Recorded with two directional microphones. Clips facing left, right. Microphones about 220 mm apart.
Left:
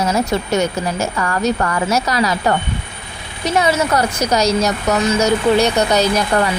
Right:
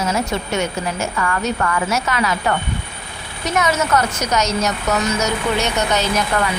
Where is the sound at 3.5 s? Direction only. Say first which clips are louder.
Left 2 dB; 35° left (ahead or behind).